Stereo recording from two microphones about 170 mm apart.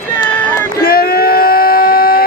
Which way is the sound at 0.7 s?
65° left (ahead or behind).